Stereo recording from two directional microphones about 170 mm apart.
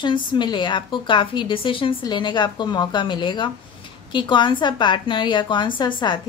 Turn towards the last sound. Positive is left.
turn(degrees=25)  # may be behind; listen again after turning